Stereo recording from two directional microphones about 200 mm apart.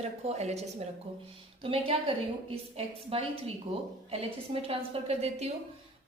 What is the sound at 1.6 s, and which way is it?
A woman's voice, 25° right (ahead or behind).